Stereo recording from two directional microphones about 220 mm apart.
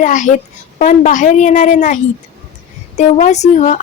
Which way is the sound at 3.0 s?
30° left (ahead or behind).